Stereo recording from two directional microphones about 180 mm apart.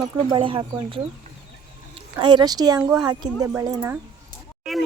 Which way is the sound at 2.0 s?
25° right (ahead or behind).